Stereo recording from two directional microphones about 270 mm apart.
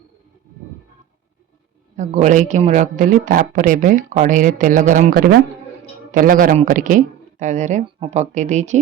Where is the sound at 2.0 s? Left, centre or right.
Right.